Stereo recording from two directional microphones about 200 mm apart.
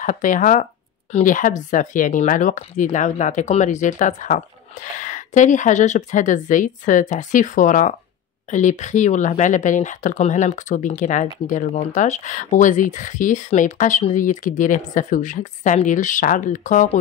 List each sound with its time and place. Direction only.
0.0 s speech: 40° left (ahead or behind)